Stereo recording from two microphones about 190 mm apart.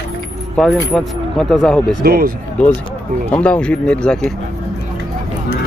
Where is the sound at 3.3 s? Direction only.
5° left (ahead or behind).